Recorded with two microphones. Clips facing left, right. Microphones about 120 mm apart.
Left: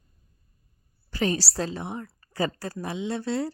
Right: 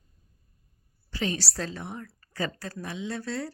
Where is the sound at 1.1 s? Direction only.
45° left (ahead or behind).